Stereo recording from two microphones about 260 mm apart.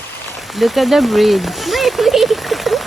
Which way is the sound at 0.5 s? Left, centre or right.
Centre.